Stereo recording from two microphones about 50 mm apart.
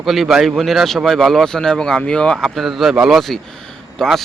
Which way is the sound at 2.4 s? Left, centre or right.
Centre.